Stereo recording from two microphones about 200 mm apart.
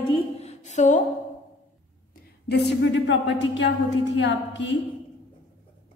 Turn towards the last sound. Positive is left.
turn(degrees=65)  # may be behind; listen again after turning